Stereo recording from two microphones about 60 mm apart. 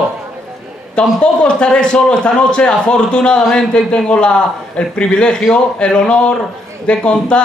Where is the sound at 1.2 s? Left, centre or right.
Centre.